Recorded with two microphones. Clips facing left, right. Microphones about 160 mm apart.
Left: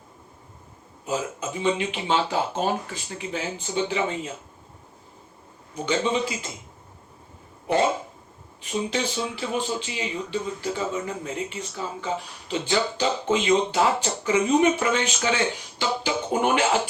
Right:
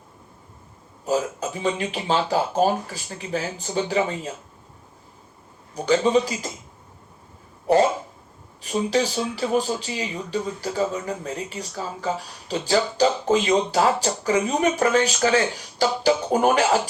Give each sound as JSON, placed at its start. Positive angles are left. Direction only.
{"t": 1.0, "sound": "speech", "side_deg": -40}
{"t": 5.7, "sound": "speech", "side_deg": -40}
{"t": 8.6, "sound": "speech", "side_deg": -40}